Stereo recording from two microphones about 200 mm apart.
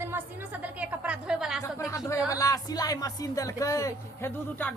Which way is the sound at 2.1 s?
15° left (ahead or behind).